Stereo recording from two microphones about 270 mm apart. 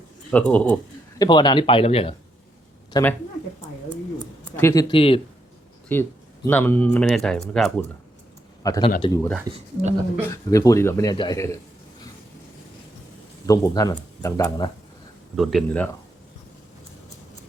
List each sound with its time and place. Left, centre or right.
0.3 s speech: centre
1.2 s a man's voice: centre
2.9 s speech: centre
4.5 s a man's voice: centre
5.9 s a man's voice: centre
8.6 s a man's voice: centre
13.5 s a man's voice: centre
15.4 s speech: centre